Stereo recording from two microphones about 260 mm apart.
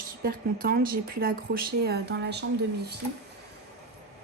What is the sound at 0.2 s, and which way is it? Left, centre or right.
Speech, right.